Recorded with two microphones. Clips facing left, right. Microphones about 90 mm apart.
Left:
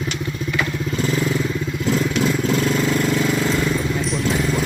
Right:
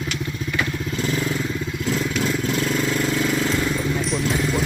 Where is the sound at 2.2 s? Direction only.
25° left (ahead or behind).